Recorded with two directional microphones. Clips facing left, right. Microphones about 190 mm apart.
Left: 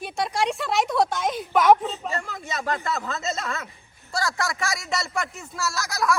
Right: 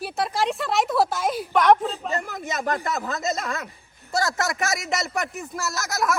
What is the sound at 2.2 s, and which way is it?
A man's voice, 20° right (ahead or behind).